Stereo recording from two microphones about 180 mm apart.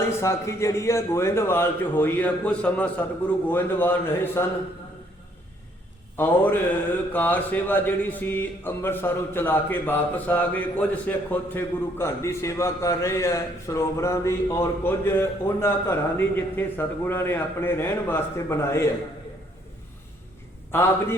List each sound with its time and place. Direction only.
0.2 s speech: 15° left (ahead or behind)
6.1 s speech: 10° left (ahead or behind)
20.7 s speech: 10° left (ahead or behind)